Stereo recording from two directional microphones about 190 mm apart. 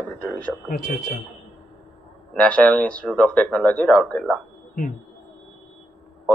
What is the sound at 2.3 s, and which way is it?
Speech, 5° left (ahead or behind).